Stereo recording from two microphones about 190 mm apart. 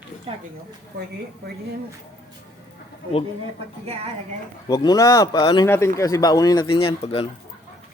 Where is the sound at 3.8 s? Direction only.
35° right (ahead or behind).